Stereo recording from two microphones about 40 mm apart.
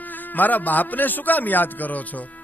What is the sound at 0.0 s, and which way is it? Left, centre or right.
A man's voice, left.